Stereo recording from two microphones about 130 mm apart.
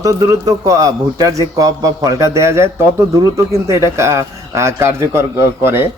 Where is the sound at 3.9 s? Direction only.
20° right (ahead or behind).